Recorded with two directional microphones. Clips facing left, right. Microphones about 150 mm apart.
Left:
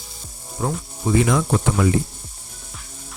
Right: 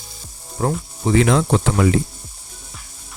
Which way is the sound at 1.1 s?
80° right.